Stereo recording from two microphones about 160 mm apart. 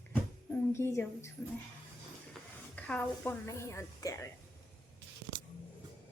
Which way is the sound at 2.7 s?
10° left (ahead or behind).